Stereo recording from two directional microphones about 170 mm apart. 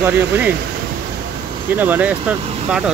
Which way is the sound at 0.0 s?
10° right (ahead or behind).